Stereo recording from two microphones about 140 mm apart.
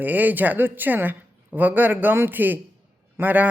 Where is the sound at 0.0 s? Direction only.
10° right (ahead or behind).